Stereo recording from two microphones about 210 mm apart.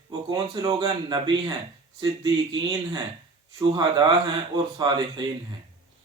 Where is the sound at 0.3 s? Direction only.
20° right (ahead or behind).